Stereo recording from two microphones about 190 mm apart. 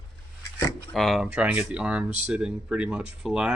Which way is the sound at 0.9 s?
Centre (ahead or behind).